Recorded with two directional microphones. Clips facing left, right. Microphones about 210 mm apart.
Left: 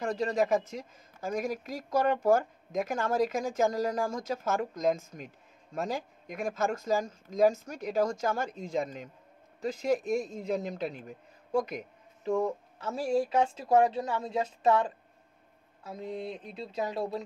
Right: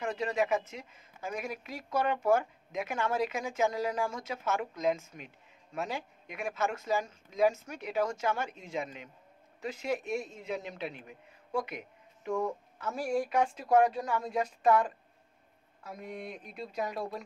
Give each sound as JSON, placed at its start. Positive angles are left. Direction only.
{"t": 0.1, "sound": "speech", "side_deg": 40}
{"t": 12.7, "sound": "a woman's voice", "side_deg": 25}